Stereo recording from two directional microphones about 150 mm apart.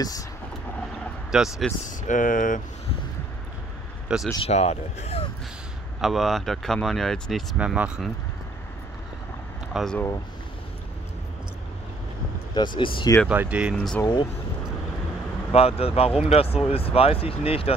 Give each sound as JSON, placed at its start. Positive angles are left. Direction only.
{"t": 0.0, "sound": "speech", "side_deg": 25}
{"t": 1.3, "sound": "speech", "side_deg": -5}
{"t": 1.9, "sound": "speech", "side_deg": 60}
{"t": 4.4, "sound": "speech", "side_deg": 45}
{"t": 5.9, "sound": "speech", "side_deg": 0}
{"t": 7.5, "sound": "speech", "side_deg": -10}
{"t": 9.8, "sound": "speech", "side_deg": 5}
{"t": 12.5, "sound": "speech", "side_deg": 30}
{"t": 13.3, "sound": "speech", "side_deg": -10}
{"t": 13.7, "sound": "speech", "side_deg": 10}
{"t": 15.5, "sound": "speech", "side_deg": 40}